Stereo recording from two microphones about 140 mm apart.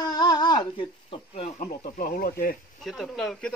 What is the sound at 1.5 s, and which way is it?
Speech, 70° left (ahead or behind).